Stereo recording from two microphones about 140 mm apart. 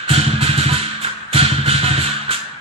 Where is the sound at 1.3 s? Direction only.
45° right (ahead or behind).